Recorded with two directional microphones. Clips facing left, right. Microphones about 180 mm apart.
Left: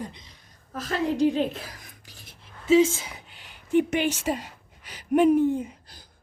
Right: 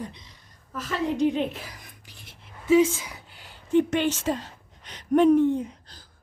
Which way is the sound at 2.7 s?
25° left (ahead or behind).